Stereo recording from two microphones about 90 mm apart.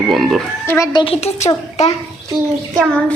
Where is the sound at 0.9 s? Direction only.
75° left (ahead or behind).